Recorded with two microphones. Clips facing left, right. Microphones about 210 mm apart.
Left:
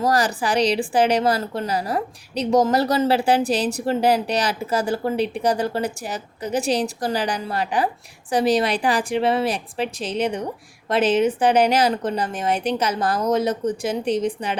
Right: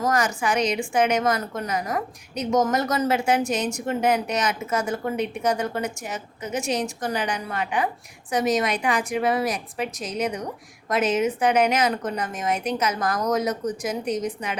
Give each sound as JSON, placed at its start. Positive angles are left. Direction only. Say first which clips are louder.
{"t": 0.0, "sound": "a woman's voice", "louder": "left 3 dB", "side_deg": 35}